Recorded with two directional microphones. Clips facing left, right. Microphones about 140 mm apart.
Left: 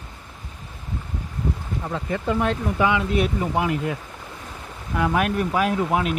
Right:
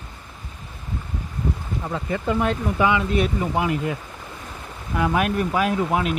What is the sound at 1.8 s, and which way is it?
Speech, 5° right (ahead or behind).